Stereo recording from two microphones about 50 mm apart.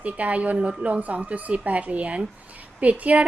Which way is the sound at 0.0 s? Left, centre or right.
Right.